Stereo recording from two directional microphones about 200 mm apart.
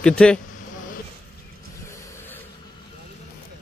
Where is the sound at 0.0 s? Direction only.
5° left (ahead or behind).